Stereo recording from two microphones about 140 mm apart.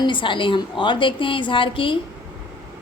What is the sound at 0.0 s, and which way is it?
A woman's voice, 35° left (ahead or behind).